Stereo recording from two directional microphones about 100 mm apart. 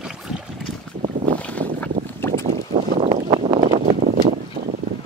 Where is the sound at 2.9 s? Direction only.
90° right; by 3.8 s 65° right (ahead or behind).